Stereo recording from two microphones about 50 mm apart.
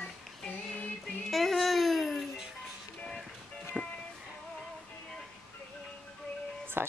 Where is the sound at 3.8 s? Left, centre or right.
Right.